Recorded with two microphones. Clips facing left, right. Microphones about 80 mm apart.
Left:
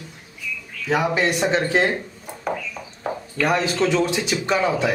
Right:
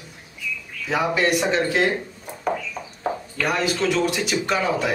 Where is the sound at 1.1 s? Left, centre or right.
Left.